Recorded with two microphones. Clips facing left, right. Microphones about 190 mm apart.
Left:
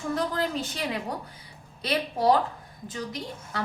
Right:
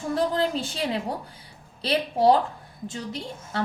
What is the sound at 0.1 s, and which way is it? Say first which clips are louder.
A woman's voice: right 4 dB; 30° right (ahead or behind).